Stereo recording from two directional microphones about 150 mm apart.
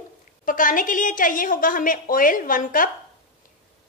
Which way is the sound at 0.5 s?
60° left (ahead or behind).